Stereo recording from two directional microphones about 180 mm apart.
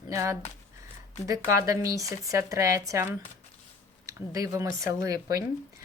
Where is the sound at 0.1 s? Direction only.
15° right (ahead or behind).